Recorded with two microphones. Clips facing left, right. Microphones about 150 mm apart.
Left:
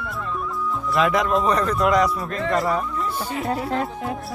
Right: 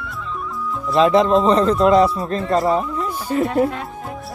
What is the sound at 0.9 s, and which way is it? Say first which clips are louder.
Speech: right 7 dB; 25° right (ahead or behind).